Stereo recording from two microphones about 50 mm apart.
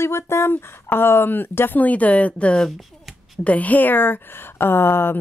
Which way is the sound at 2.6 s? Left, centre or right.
Centre.